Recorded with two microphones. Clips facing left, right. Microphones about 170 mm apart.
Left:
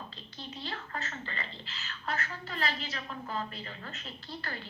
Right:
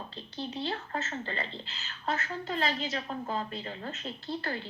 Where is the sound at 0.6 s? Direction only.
30° right (ahead or behind).